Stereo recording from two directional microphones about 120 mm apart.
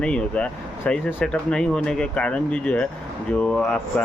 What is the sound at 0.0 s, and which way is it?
Speech, 10° left (ahead or behind).